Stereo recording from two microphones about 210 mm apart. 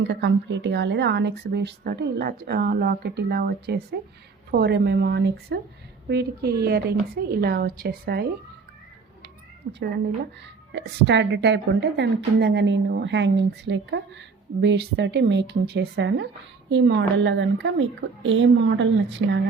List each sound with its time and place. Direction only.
0.0 s speech: 55° right (ahead or behind)
9.7 s a woman's voice: 50° right (ahead or behind)